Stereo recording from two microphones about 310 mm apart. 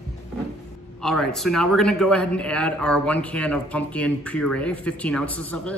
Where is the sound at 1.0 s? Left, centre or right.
Centre.